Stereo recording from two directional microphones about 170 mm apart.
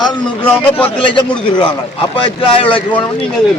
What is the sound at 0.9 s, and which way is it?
Speech, 30° left (ahead or behind).